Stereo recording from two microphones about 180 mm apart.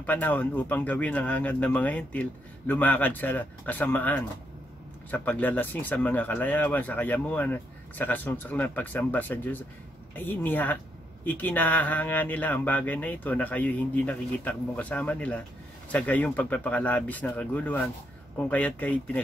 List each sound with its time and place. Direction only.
0.0 s speech: 10° left (ahead or behind)